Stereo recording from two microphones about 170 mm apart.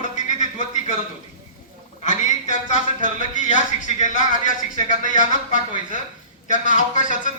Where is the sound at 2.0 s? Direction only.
45° left (ahead or behind).